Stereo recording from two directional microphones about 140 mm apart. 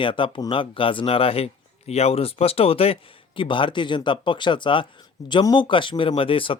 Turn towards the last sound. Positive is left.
turn(degrees=40)  # may be behind; listen again after turning